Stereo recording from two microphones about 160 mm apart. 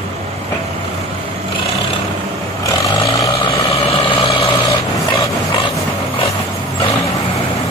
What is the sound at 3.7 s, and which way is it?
Vehicle, 35° left (ahead or behind).